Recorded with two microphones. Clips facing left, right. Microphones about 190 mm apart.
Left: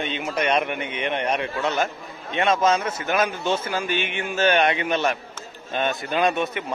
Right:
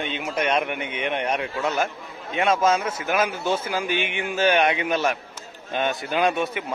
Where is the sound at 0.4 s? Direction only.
5° right (ahead or behind).